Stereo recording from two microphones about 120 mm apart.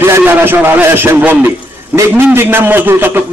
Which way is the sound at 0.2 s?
15° right (ahead or behind).